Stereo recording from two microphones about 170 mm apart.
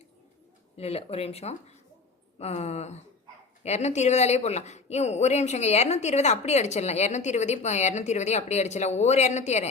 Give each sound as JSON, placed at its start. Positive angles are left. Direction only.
{"t": 0.8, "sound": "speech", "side_deg": 35}